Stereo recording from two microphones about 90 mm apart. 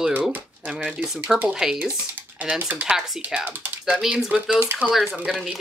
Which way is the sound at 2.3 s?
20° right (ahead or behind).